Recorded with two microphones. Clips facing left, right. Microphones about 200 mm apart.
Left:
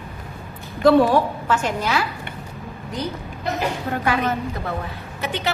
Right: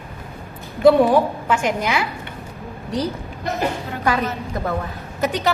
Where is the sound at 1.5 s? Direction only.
10° right (ahead or behind).